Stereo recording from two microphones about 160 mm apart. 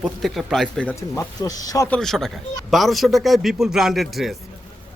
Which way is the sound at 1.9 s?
5° left (ahead or behind).